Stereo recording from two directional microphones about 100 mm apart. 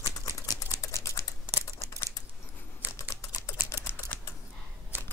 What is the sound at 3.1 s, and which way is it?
Typing, 25° left (ahead or behind).